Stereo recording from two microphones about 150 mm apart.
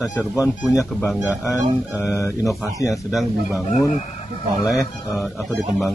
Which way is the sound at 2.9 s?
Centre (ahead or behind).